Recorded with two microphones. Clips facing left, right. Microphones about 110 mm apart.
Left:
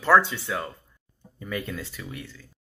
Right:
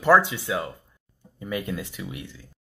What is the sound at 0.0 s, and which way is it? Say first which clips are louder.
Speech: right 1 dB; 15° right (ahead or behind).